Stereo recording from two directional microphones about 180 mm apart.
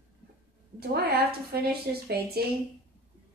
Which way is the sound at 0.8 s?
60° right (ahead or behind).